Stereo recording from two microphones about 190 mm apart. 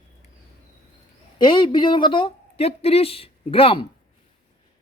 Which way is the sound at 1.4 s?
25° left (ahead or behind).